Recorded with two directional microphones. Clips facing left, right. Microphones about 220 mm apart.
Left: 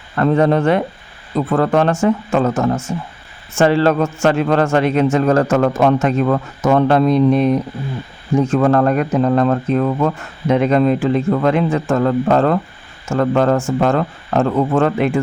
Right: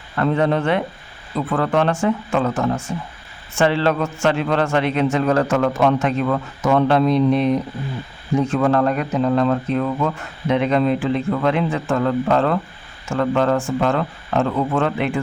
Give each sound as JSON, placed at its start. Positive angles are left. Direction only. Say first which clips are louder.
{"t": 0.2, "sound": "a man's voice", "louder": "left 4 dB", "side_deg": 45}